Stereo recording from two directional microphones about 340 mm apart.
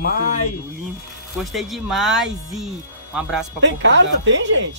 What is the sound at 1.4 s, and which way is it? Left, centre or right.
Speech, centre.